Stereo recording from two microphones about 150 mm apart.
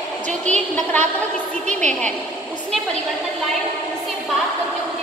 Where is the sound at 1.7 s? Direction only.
55° right (ahead or behind).